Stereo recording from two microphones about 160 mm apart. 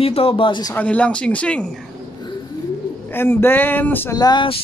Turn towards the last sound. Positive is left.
turn(degrees=30)  # may be behind; listen again after turning